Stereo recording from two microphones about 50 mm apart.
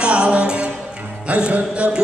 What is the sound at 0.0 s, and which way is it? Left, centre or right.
Music, right.